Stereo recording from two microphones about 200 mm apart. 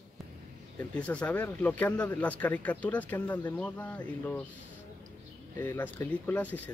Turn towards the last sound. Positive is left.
turn(degrees=10)  # may be behind; listen again after turning